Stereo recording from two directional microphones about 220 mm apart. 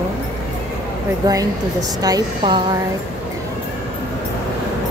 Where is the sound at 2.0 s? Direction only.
20° right (ahead or behind).